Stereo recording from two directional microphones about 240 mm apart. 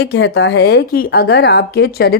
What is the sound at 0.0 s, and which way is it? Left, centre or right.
Speech, left.